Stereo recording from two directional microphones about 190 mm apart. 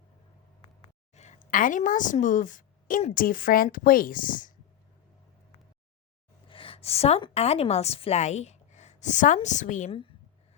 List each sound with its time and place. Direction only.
0.6 s a sound: 30° left (ahead or behind)
1.5 s a woman's voice: 45° left (ahead or behind)
6.5 s a woman's voice: 30° left (ahead or behind)